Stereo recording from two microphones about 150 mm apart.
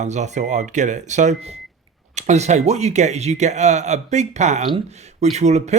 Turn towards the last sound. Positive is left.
turn(degrees=-50)  # may be behind; listen again after turning